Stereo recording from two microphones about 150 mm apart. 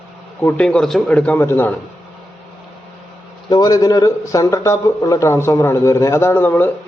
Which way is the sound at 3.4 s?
25° left (ahead or behind).